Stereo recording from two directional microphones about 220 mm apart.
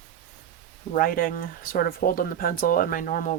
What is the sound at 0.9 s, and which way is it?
Speech, 40° left (ahead or behind).